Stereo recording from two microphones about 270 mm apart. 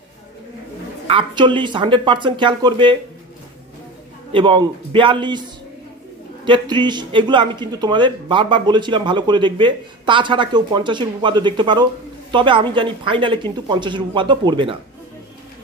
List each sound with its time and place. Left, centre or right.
1.0 s a man's voice: centre
4.3 s a man's voice: centre
6.4 s a man's voice: centre